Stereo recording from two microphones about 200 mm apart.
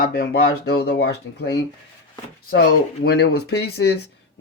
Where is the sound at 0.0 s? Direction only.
50° left (ahead or behind).